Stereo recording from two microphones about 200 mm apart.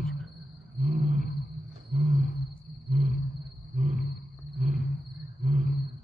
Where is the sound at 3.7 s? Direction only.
35° right (ahead or behind).